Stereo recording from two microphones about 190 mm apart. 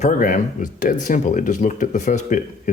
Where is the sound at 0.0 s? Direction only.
45° left (ahead or behind).